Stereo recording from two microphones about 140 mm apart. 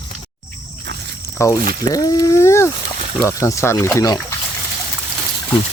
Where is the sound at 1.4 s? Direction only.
20° left (ahead or behind).